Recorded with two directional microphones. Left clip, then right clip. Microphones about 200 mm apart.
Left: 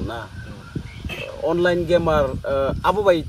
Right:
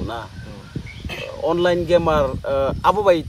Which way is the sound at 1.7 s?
30° right (ahead or behind).